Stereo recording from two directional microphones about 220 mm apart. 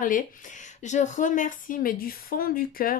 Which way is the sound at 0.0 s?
35° left (ahead or behind).